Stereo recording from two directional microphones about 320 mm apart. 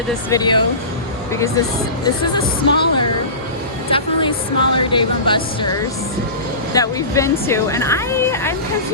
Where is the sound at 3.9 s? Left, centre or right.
Centre.